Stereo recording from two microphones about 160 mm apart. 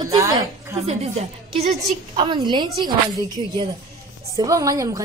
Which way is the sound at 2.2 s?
30° right (ahead or behind).